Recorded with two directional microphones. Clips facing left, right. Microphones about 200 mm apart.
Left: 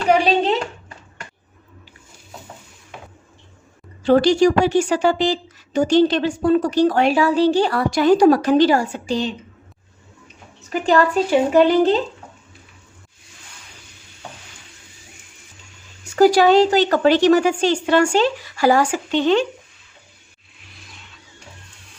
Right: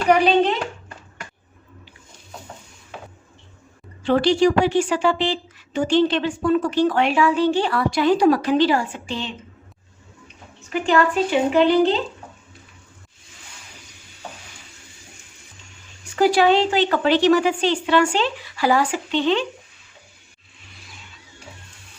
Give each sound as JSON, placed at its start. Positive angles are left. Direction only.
{"t": 4.0, "sound": "a woman's voice", "side_deg": 40}
{"t": 10.7, "sound": "a woman's voice", "side_deg": 40}
{"t": 16.1, "sound": "a woman's voice", "side_deg": 40}